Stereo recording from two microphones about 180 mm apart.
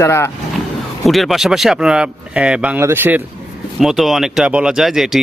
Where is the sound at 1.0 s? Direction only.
Centre (ahead or behind).